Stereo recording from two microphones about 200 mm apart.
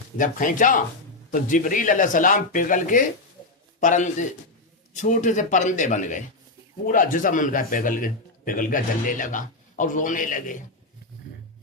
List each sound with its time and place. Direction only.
0.2 s a man's voice: 40° left (ahead or behind)